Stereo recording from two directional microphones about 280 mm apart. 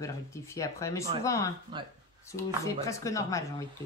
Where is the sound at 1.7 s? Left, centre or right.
Centre.